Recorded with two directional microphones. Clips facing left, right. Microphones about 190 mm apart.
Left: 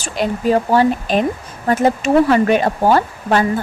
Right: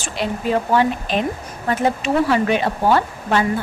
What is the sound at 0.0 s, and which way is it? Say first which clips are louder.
Speech: left 4 dB; 40° left (ahead or behind).